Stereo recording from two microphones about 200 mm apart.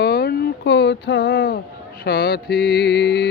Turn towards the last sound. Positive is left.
turn(degrees=55)  # may be behind; listen again after turning